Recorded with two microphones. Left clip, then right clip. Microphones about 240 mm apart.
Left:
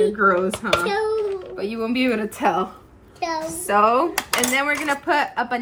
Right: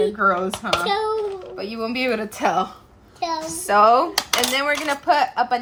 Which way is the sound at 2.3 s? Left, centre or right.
Right.